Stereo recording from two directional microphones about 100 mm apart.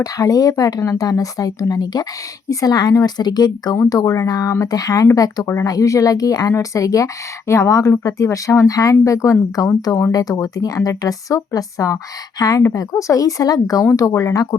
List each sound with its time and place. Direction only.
0.0 s speech: 35° left (ahead or behind)